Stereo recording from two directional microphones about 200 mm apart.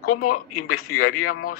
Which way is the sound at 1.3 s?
45° left (ahead or behind).